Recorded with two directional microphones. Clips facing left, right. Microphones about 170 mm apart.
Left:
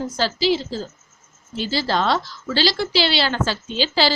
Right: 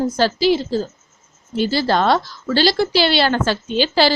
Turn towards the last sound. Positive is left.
turn(degrees=-55)  # may be behind; listen again after turning